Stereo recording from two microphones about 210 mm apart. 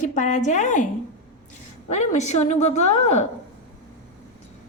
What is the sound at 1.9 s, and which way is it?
Speech, 35° left (ahead or behind).